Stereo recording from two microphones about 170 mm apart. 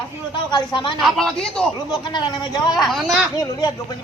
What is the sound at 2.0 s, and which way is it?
Speech, 25° left (ahead or behind).